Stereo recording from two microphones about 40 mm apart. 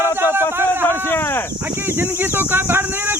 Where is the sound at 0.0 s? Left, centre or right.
Right.